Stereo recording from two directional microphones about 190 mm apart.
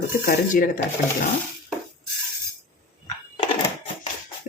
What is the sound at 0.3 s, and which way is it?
Speech, 45° left (ahead or behind).